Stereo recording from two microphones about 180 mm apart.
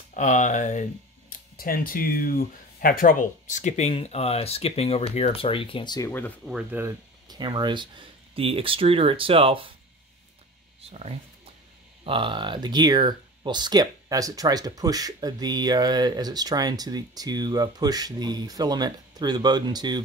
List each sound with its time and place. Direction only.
0.1 s speech: 45° left (ahead or behind); by 6.3 s 15° left (ahead or behind)
6.4 s speech: 5° right (ahead or behind)
6.8 s speech: 25° right (ahead or behind)
10.8 s speech: 35° right (ahead or behind)